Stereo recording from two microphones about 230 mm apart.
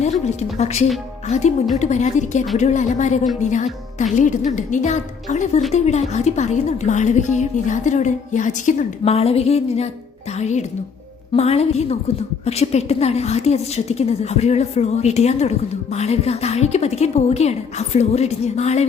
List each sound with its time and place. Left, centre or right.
0.0 s a woman's voice: left
11.3 s a woman's voice: left